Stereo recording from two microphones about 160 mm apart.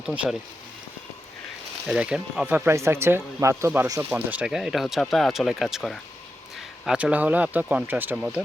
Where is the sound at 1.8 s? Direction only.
5° right (ahead or behind).